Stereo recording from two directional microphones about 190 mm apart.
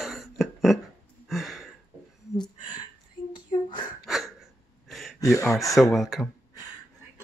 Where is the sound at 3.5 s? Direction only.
25° left (ahead or behind).